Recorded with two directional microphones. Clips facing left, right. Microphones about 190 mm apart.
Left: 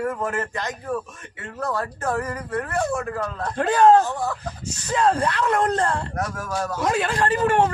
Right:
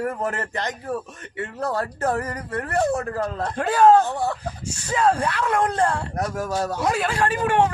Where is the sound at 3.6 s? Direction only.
5° right (ahead or behind).